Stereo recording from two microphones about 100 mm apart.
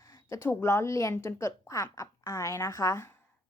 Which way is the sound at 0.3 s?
30° left (ahead or behind).